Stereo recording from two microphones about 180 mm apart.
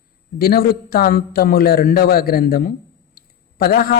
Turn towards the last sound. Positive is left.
turn(degrees=55)  # may be behind; listen again after turning